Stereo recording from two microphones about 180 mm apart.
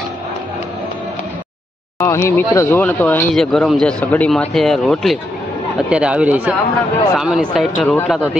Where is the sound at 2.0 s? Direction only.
15° left (ahead or behind).